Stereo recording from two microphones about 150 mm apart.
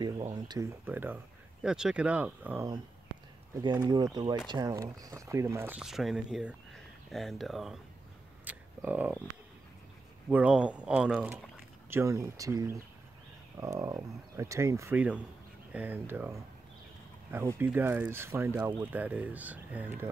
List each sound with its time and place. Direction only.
0.3 s speech: 25° right (ahead or behind)
3.5 s speech: 25° right (ahead or behind)
5.8 s speech: centre (ahead or behind)
8.5 s a sound: 10° right (ahead or behind)
10.3 s speech: 10° right (ahead or behind)
15.0 s speech: 10° right (ahead or behind)